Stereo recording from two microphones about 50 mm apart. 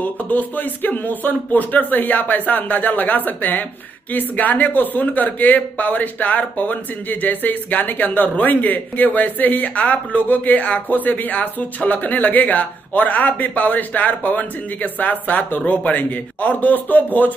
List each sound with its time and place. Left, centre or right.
0.0 s speech: left